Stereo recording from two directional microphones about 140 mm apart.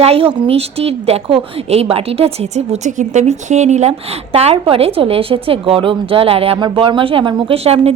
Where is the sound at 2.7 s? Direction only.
60° right (ahead or behind).